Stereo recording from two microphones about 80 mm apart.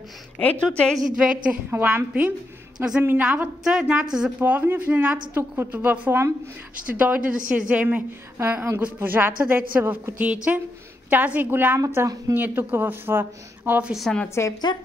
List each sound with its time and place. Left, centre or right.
0.4 s a woman's voice: centre
1.1 s a woman's voice: centre
1.7 s a woman's voice: right
3.6 s a woman's voice: centre
4.4 s a woman's voice: right
8.4 s a woman's voice: right
14.1 s a woman's voice: centre
14.7 s speech: left